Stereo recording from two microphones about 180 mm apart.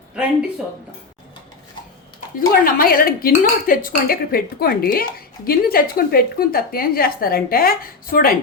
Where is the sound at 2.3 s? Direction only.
55° left (ahead or behind).